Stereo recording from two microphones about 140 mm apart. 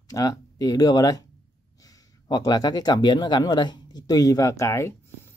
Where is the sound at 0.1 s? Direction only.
25° left (ahead or behind).